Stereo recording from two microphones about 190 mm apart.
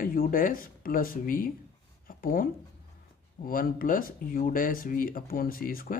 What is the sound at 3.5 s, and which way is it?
Speech, 50° left (ahead or behind).